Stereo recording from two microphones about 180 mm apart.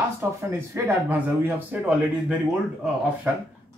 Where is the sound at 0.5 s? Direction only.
15° right (ahead or behind).